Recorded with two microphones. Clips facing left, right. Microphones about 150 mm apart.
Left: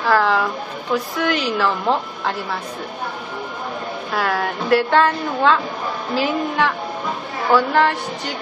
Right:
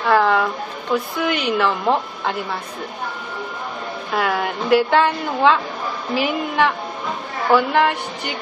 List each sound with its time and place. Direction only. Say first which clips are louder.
0.0 s a sound: right 1 dB; centre (ahead or behind)
0.9 s a woman's voice: even; centre (ahead or behind)
4.1 s a woman's voice: right 1 dB; centre (ahead or behind)